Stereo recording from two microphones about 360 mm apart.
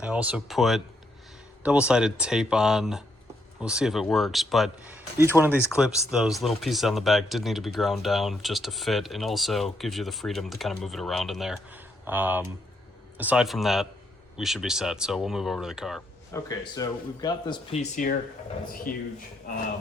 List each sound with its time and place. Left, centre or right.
0.0 s a man's voice: centre; by 19.0 s left